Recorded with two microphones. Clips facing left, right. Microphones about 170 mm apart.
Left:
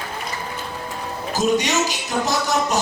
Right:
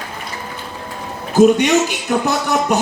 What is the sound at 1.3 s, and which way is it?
Speech, 60° right (ahead or behind).